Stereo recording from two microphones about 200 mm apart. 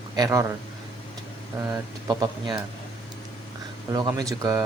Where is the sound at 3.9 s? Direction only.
20° right (ahead or behind).